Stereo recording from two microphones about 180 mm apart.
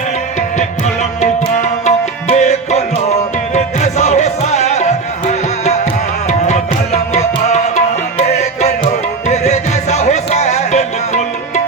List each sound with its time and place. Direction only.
1.2 s music: 40° left (ahead or behind)